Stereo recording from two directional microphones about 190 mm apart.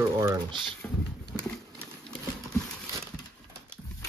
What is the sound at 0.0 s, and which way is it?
Typing, 15° right (ahead or behind).